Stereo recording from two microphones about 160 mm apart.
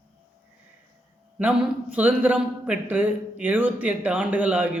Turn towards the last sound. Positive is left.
turn(degrees=-10)  # may be behind; listen again after turning